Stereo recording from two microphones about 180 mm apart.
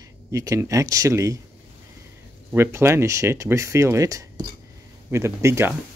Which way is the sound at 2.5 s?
15° right (ahead or behind).